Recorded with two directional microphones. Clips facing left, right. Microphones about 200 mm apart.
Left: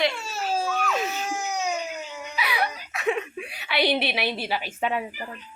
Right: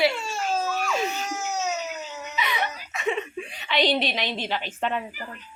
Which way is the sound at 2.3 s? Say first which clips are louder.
Left 1 dB; 5° left (ahead or behind).